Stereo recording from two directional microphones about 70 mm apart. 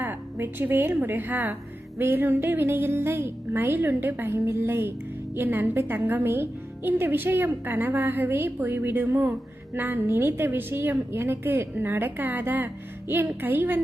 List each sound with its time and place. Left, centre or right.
0.0 s a woman's voice: right